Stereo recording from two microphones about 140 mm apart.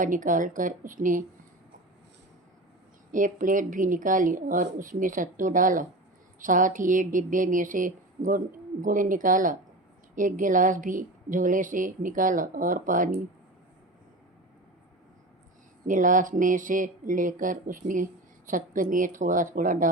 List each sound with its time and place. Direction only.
0.0 s speech: 70° right (ahead or behind)
3.1 s speech: 70° right (ahead or behind)
15.9 s speech: 70° right (ahead or behind)